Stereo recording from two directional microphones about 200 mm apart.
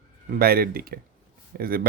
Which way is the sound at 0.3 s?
50° right (ahead or behind).